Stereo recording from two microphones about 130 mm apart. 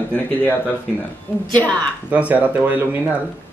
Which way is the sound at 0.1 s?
15° left (ahead or behind).